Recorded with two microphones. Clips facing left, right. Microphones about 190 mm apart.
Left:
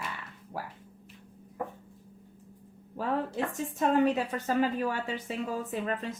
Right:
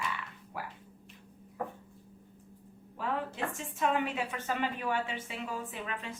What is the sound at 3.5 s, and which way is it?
A woman's voice, 40° left (ahead or behind).